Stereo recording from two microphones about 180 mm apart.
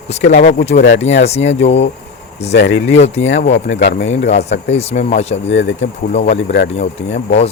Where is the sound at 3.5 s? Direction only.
80° left.